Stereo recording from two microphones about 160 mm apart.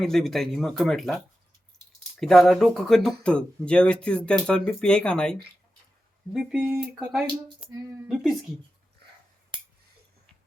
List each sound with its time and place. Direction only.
0.0 s speech: 5° left (ahead or behind)
7.3 s speech: 20° right (ahead or behind)
8.0 s speech: centre (ahead or behind)